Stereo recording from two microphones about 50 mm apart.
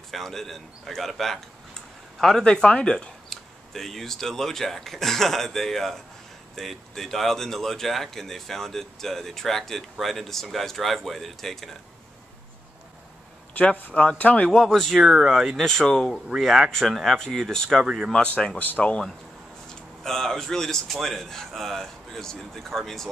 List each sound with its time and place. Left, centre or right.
0.1 s speech: centre
2.4 s speech: centre
3.3 s speech: centre
14.1 s speech: left
14.5 s speech: centre
15.0 s speech: centre
15.5 s speech: centre
16.3 s speech: centre
17.2 s speech: centre
17.8 s speech: centre
18.1 s speech: centre
18.6 s speech: left
20.0 s speech: centre